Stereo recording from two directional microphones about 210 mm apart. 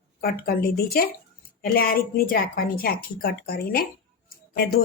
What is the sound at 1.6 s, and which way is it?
A woman's voice, 45° left (ahead or behind).